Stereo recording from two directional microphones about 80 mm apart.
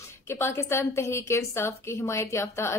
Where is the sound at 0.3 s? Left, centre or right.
Left.